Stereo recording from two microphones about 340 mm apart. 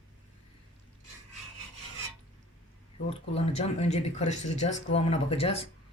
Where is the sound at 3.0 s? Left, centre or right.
Centre.